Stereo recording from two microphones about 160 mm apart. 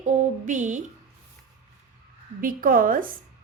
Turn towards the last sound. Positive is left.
turn(degrees=-60)  # may be behind; listen again after turning